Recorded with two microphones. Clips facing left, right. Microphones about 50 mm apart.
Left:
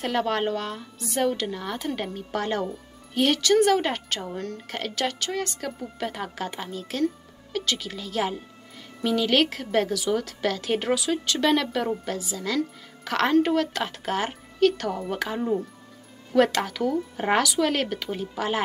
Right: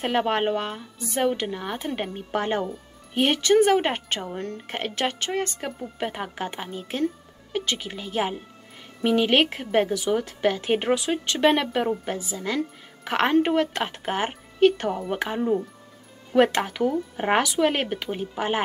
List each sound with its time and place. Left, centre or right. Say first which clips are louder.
0.0 s a woman's voice: right 2 dB; right
15.4 s speech: right 2 dB; centre
16.5 s a woman's voice: right 1 dB; right